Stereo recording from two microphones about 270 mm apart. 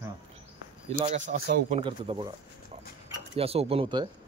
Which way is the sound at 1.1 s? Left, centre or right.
Right.